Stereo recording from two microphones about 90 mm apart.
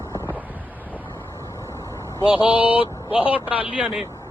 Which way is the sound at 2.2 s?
70° left (ahead or behind).